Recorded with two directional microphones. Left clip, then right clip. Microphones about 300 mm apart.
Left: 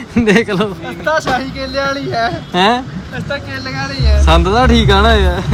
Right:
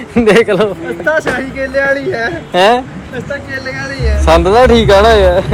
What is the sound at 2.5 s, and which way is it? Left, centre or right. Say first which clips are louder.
Speech: right 5 dB; centre.